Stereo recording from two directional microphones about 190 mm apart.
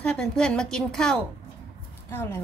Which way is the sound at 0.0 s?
5° left (ahead or behind).